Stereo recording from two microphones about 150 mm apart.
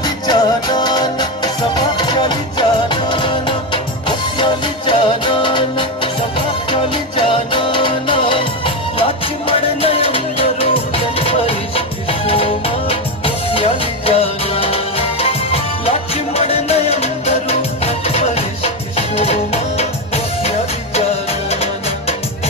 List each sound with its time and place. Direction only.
0.0 s music: 25° left (ahead or behind); by 19.9 s 45° left (ahead or behind)
21.5 s music: 45° left (ahead or behind)